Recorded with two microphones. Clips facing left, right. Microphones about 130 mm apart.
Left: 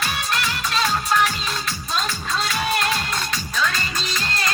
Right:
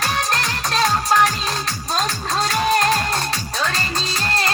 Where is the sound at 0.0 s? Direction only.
40° right (ahead or behind).